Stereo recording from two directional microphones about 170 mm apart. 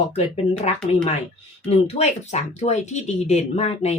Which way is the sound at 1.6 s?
40° left (ahead or behind).